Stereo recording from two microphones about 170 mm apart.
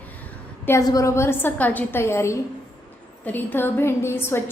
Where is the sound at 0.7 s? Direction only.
20° left (ahead or behind).